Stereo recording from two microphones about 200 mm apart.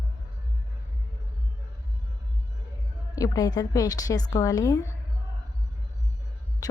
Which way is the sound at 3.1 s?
15° left (ahead or behind).